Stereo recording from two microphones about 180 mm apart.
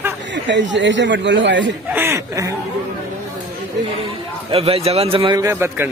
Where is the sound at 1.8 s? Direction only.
10° right (ahead or behind).